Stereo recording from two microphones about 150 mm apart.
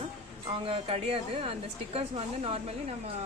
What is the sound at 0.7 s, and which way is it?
Speech, 40° right (ahead or behind).